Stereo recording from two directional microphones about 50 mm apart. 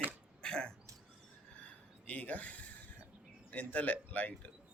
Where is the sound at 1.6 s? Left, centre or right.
Left.